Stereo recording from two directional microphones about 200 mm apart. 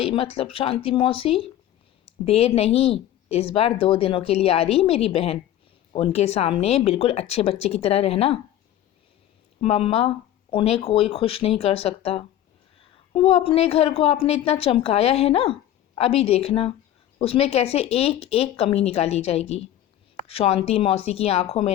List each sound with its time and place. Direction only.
0.0 s speech: 25° left (ahead or behind)
9.6 s speech: 30° left (ahead or behind)